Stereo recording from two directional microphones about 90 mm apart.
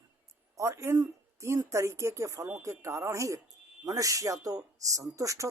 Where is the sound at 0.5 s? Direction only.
35° right (ahead or behind).